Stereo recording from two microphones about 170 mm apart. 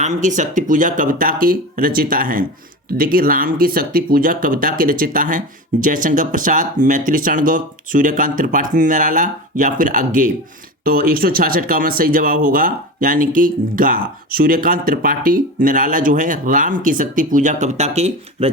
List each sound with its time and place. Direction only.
0.0 s speech: 45° right (ahead or behind)